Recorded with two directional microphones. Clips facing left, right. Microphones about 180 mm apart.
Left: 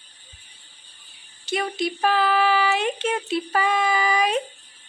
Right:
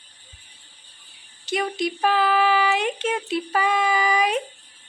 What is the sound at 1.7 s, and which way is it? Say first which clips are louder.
Speech: even; 15° right (ahead or behind).